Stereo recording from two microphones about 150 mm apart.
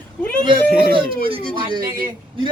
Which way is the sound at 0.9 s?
35° right (ahead or behind).